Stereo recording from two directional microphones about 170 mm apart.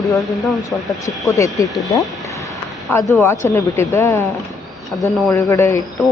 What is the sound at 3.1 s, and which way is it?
Speech, 15° left (ahead or behind).